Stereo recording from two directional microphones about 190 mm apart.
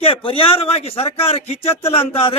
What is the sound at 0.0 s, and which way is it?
A man's voice, 30° left (ahead or behind).